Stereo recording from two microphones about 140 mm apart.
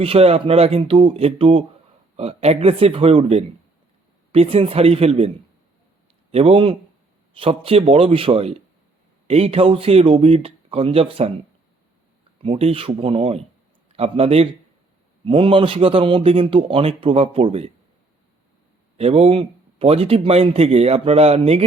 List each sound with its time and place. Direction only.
0.0 s speech: 45° right (ahead or behind)
6.3 s speech: 45° right (ahead or behind)
12.4 s a man's voice: 45° right (ahead or behind)
18.9 s speech: 45° right (ahead or behind)